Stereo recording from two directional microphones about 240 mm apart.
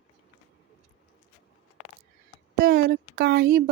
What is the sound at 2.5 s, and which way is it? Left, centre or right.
Speech, right.